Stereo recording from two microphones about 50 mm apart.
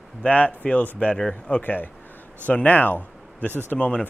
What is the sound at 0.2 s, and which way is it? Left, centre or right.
Speech, left.